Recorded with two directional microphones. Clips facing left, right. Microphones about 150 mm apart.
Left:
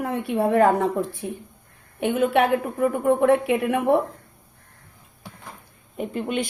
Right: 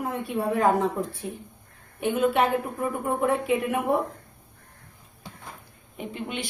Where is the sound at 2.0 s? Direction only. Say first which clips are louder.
Left 3 dB; 65° left (ahead or behind).